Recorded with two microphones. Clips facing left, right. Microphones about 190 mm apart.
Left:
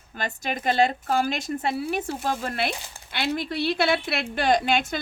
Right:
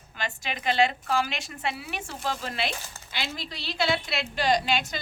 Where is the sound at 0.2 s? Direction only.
45° left (ahead or behind).